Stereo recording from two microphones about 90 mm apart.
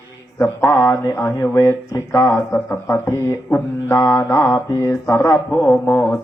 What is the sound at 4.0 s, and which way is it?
Speech, 35° left (ahead or behind).